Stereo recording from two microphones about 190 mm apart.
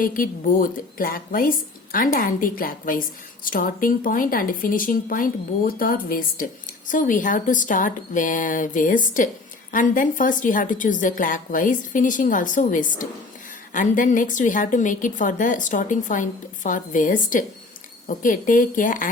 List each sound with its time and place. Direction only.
0.0 s speech: 45° left (ahead or behind)